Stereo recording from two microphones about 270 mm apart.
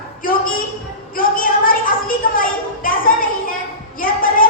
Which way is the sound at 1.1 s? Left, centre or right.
Left.